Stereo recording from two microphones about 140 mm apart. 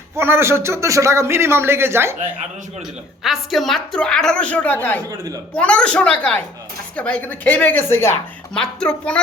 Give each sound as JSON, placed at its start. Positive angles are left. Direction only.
{"t": 0.2, "sound": "speech", "side_deg": -20}
{"t": 3.2, "sound": "a woman's voice", "side_deg": 0}
{"t": 5.0, "sound": "a man's voice", "side_deg": -25}
{"t": 5.5, "sound": "a woman's voice", "side_deg": 10}
{"t": 8.5, "sound": "a woman's voice", "side_deg": 5}